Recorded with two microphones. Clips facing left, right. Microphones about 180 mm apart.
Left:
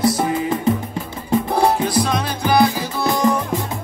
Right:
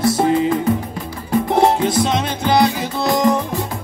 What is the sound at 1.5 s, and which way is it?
Music, 25° right (ahead or behind).